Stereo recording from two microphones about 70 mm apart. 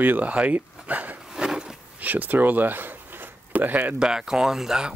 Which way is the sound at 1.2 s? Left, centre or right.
Centre.